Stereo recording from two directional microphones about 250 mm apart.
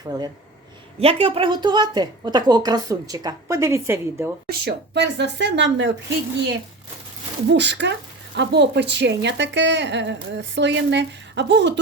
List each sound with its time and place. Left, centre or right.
0.1 s a woman's voice: centre
4.4 s a woman's voice: right
7.5 s a woman's voice: right